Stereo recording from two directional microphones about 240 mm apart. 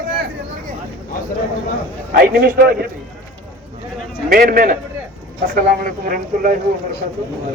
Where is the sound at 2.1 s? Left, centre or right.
Right.